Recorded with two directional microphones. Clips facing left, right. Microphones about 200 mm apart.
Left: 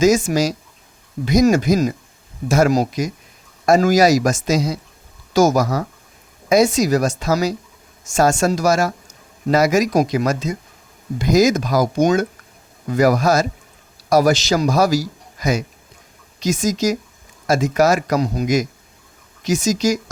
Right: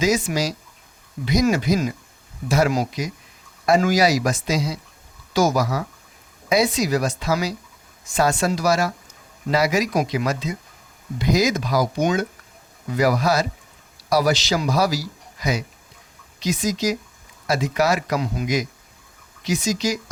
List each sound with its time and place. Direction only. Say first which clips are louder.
0.0 s a man's voice: left 6 dB; 45° left (ahead or behind)